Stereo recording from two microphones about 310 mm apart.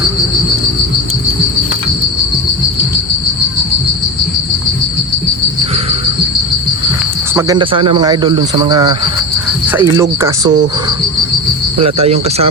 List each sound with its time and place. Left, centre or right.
7.3 s speech: centre
11.9 s speech: centre